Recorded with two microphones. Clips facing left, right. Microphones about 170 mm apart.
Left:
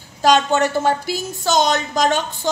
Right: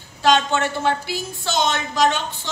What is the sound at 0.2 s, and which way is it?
A woman's voice, 40° left (ahead or behind).